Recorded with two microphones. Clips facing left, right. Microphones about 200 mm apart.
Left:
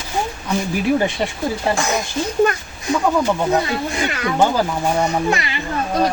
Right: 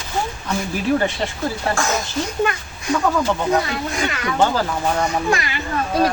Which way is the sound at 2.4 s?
40° left (ahead or behind).